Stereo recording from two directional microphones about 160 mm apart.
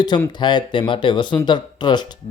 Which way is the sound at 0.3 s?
30° left (ahead or behind).